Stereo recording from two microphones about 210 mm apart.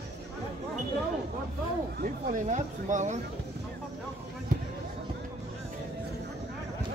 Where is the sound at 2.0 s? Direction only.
35° right (ahead or behind).